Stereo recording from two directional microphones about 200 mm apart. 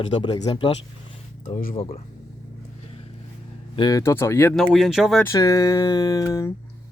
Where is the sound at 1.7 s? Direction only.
30° left (ahead or behind).